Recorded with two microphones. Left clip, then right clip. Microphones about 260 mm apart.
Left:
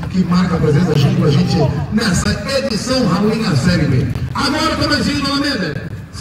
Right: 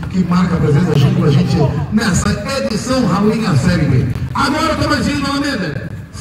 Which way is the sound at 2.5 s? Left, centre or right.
Right.